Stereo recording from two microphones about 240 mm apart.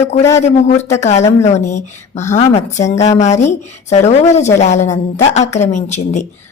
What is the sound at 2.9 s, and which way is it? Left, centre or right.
Speech, centre.